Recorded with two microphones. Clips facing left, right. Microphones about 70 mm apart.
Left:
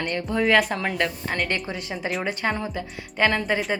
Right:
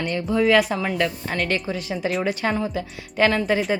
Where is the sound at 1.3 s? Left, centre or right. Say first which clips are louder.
Right 2 dB; centre.